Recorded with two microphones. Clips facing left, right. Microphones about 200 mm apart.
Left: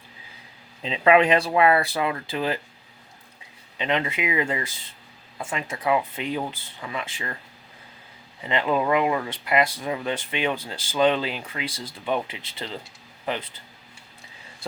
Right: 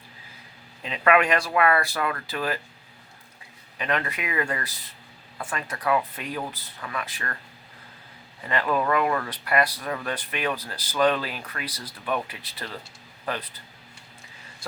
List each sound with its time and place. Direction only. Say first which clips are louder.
0.8 s speech: left 3 dB; 25° left (ahead or behind)
3.8 s speech: left 3 dB; 20° left (ahead or behind)
8.4 s speech: left 2 dB; 20° left (ahead or behind)